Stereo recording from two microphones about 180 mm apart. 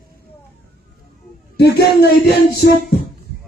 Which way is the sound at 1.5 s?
60° left (ahead or behind).